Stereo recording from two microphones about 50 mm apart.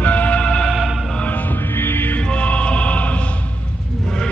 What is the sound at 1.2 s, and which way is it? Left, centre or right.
Music, left.